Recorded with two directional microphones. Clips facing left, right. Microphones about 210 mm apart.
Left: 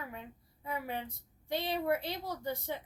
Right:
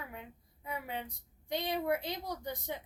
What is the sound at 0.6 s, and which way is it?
A woman's voice, 20° right (ahead or behind).